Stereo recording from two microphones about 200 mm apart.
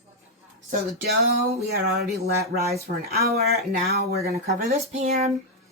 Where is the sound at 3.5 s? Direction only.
50° right (ahead or behind).